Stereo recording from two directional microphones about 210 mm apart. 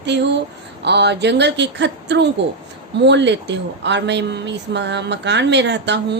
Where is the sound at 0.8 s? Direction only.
55° right (ahead or behind).